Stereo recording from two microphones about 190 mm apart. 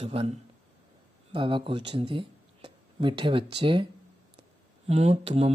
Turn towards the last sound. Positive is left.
turn(degrees=-30)  # may be behind; listen again after turning